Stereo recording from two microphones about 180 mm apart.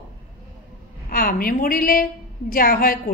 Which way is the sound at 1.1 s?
55° left (ahead or behind).